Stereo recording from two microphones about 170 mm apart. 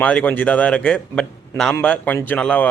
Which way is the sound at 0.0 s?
10° left (ahead or behind).